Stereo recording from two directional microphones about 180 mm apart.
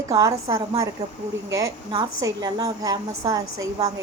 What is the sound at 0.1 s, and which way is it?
A woman's voice, 20° right (ahead or behind).